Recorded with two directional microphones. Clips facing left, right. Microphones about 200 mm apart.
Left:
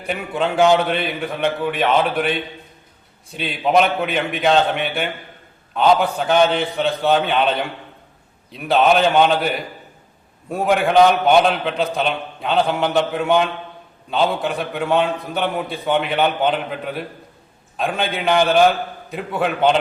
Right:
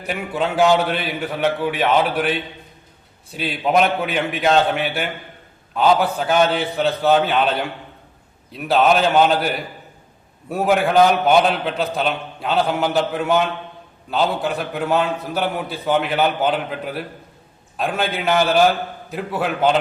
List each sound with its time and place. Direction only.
0.1 s a man's voice: 5° right (ahead or behind)